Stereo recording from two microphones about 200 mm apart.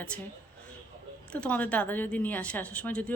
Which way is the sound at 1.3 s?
5° left (ahead or behind).